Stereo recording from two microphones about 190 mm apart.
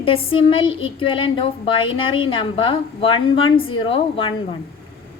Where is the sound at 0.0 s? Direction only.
30° left (ahead or behind).